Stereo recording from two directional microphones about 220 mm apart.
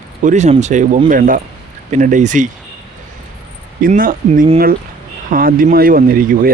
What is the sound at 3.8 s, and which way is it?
Speech, 40° right (ahead or behind).